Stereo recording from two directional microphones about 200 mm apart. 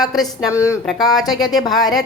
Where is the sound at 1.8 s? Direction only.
20° left (ahead or behind).